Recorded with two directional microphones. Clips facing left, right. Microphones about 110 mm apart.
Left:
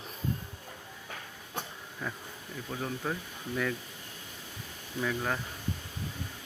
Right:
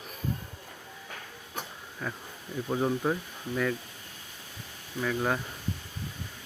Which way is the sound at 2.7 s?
25° right (ahead or behind).